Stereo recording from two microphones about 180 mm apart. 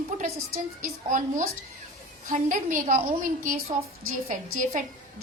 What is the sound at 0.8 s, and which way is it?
A woman's voice, 45° right (ahead or behind).